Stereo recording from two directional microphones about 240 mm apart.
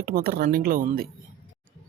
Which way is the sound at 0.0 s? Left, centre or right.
Right.